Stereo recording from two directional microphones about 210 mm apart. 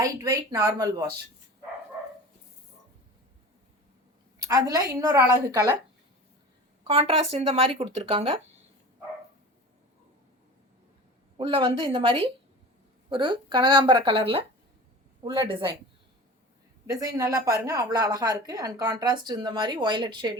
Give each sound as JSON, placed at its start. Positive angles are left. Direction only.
{"t": 0.0, "sound": "a woman's voice", "side_deg": -15}
{"t": 4.4, "sound": "a woman's voice", "side_deg": -15}
{"t": 6.8, "sound": "speech", "side_deg": -25}
{"t": 11.3, "sound": "speech", "side_deg": -25}
{"t": 16.8, "sound": "a woman's voice", "side_deg": -15}